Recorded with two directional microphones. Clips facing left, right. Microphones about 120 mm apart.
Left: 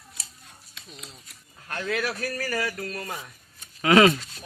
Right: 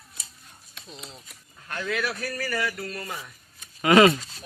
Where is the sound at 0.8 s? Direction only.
30° right (ahead or behind).